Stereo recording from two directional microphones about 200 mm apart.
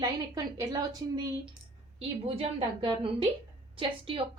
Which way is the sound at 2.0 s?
30° right (ahead or behind).